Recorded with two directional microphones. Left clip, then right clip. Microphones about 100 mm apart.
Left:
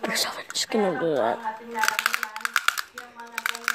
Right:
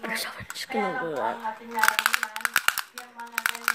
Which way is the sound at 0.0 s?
45° left (ahead or behind).